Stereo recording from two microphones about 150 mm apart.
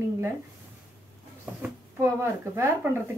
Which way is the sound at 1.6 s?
15° right (ahead or behind).